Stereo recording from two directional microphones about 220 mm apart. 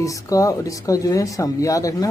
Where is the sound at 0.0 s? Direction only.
15° left (ahead or behind).